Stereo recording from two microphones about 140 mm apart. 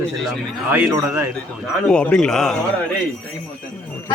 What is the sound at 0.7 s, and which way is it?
Speech, 15° right (ahead or behind).